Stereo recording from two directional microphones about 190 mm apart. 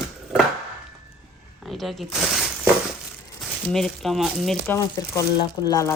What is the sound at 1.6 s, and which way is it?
Shuffling cards, centre (ahead or behind).